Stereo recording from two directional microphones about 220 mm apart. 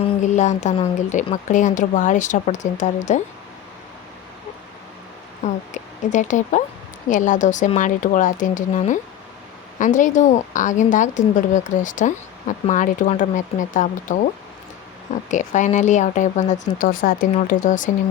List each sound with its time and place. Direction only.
0.0 s a woman's voice: 35° left (ahead or behind)
5.4 s a woman's voice: 35° left (ahead or behind)
15.3 s a woman's voice: 35° left (ahead or behind)